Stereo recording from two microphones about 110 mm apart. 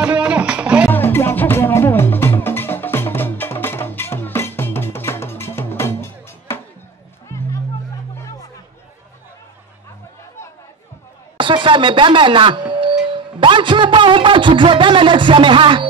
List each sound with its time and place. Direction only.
0.0 s music: 10° right (ahead or behind)
0.8 s music: 20° left (ahead or behind)
11.3 s speech: 50° right (ahead or behind)